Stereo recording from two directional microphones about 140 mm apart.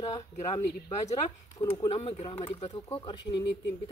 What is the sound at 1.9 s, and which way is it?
Speech, 45° left (ahead or behind).